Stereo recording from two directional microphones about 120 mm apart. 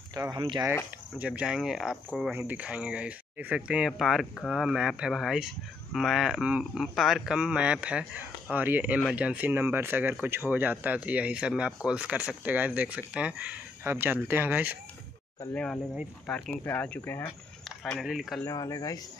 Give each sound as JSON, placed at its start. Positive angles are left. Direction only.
{"t": 0.1, "sound": "speech", "side_deg": -35}
{"t": 1.1, "sound": "speech", "side_deg": -10}
{"t": 2.3, "sound": "speech", "side_deg": -15}
{"t": 15.5, "sound": "speech", "side_deg": 10}
{"t": 17.6, "sound": "speech", "side_deg": 0}
{"t": 18.4, "sound": "speech", "side_deg": 30}